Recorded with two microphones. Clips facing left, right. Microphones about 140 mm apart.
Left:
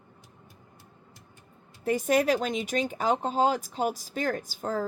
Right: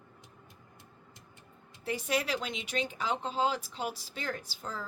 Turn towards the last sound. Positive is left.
turn(degrees=45)  # may be behind; listen again after turning